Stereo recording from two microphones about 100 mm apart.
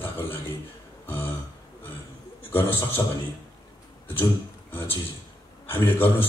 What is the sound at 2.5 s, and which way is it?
Speech, 20° left (ahead or behind).